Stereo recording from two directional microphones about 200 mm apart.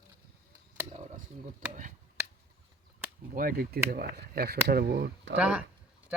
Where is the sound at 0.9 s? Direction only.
40° right (ahead or behind).